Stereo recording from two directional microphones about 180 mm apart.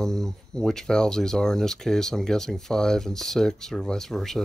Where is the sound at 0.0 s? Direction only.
5° left (ahead or behind).